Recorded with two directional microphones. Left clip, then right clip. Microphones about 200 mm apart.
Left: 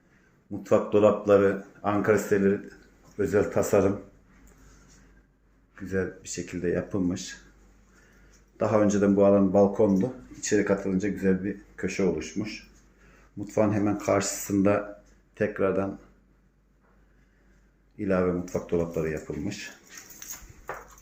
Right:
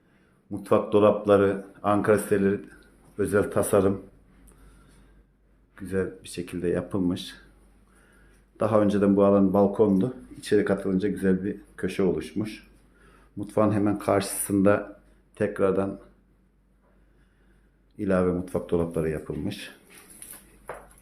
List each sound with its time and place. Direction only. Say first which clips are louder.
0.7 s speech: right 1 dB; 10° right (ahead or behind)
6.2 s speech: right 1 dB; 20° right (ahead or behind)
8.5 s speech: right 1 dB; 10° right (ahead or behind)
17.9 s speech: right 1 dB; 15° right (ahead or behind)